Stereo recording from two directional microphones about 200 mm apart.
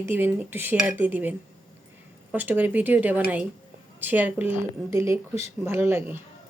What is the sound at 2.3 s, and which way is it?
Speech, 10° right (ahead or behind).